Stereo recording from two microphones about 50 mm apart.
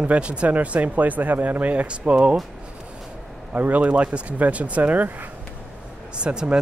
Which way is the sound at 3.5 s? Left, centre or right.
Right.